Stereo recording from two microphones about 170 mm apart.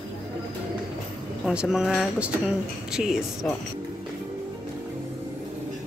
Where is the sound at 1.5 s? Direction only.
5° right (ahead or behind).